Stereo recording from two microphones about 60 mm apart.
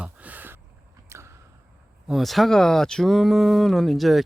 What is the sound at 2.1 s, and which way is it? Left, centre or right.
Speech, centre.